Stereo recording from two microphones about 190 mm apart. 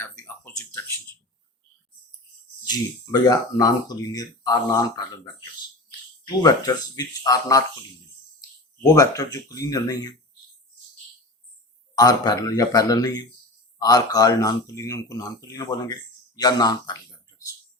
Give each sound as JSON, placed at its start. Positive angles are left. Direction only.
{"t": 0.0, "sound": "a sound", "side_deg": 10}
{"t": 2.6, "sound": "speech", "side_deg": 20}
{"t": 6.2, "sound": "speech", "side_deg": 20}
{"t": 11.9, "sound": "speech", "side_deg": 20}